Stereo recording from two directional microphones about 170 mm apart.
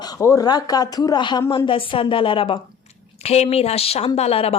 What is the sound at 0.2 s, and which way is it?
Speech, 20° left (ahead or behind).